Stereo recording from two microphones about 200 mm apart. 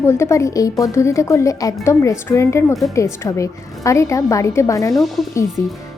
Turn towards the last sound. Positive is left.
turn(degrees=15)  # may be behind; listen again after turning